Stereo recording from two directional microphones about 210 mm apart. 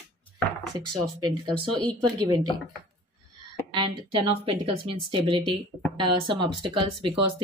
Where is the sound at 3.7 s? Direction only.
25° right (ahead or behind).